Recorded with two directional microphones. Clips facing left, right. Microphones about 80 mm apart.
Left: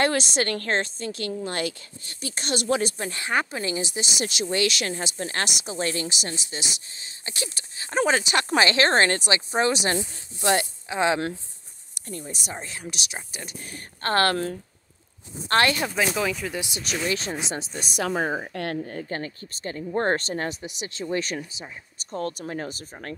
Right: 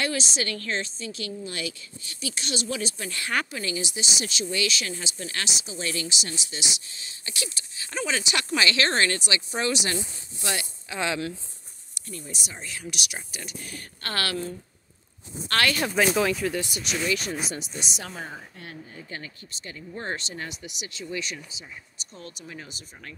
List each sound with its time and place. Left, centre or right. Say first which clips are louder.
0.0 s a woman's voice: left 6 dB; left
3.0 s speech: left 3 dB; left
3.9 s speech: left 3 dB; left
10.9 s speech: left 6 dB; left
12.1 s speech: left 4 dB; left
15.4 s speech: left 4 dB; left
15.8 s speech: right 2 dB; centre
16.8 s speech: left 2 dB; left
18.0 s a woman's voice: left 12 dB; left